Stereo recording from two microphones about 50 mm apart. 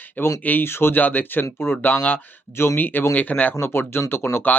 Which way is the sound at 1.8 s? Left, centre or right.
Left.